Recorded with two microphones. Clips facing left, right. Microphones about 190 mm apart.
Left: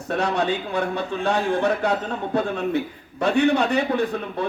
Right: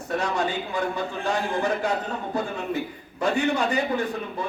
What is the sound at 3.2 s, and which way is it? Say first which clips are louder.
Speech: left 4 dB; 65° left (ahead or behind).